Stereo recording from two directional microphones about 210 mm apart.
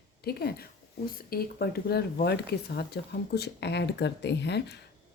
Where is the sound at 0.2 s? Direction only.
50° left (ahead or behind).